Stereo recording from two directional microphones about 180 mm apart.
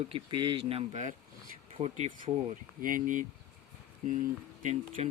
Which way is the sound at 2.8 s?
50° right (ahead or behind).